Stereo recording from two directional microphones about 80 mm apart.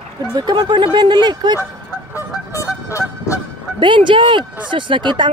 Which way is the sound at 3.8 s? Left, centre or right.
Right.